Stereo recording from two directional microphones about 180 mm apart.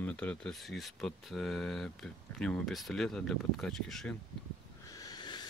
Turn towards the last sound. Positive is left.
turn(degrees=25)  # may be behind; listen again after turning